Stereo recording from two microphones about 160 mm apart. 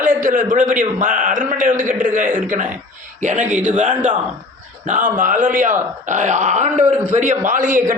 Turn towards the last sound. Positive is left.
turn(degrees=-55)  # may be behind; listen again after turning